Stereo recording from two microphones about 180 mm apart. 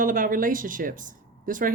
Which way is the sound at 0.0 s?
50° right (ahead or behind).